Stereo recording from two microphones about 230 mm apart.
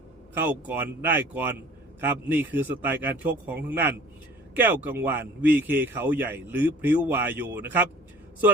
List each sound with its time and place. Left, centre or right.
0.3 s a man's voice: centre